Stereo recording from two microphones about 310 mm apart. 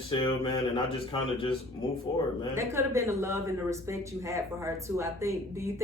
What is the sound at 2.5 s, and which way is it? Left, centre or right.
Speech, centre.